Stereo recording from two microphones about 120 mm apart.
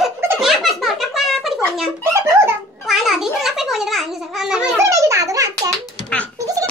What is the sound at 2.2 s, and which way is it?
Giggle, 25° right (ahead or behind).